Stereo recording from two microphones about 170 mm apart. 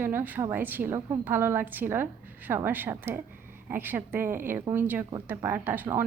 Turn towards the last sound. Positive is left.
turn(degrees=-10)  # may be behind; listen again after turning